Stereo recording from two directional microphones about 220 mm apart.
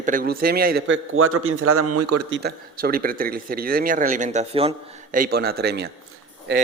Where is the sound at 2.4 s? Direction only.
45° right (ahead or behind); by 4.7 s 25° right (ahead or behind).